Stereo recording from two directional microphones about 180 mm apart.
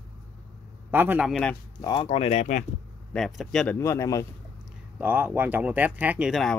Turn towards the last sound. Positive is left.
turn(degrees=0)  # may be behind; listen again after turning